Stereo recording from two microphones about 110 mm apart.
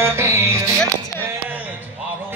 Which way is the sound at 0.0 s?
25° right (ahead or behind).